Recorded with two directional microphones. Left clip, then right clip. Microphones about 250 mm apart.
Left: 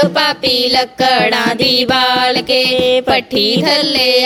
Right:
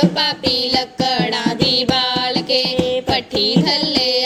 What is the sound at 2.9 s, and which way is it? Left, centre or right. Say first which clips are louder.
Music: left 7 dB; left.